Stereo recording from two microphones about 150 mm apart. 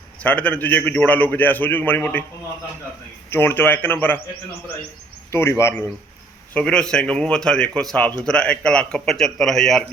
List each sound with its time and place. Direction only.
0.2 s a man's voice: 10° left (ahead or behind)
3.2 s a man's voice: 15° left (ahead or behind)
5.3 s a man's voice: 20° left (ahead or behind)
6.5 s speech: 5° left (ahead or behind)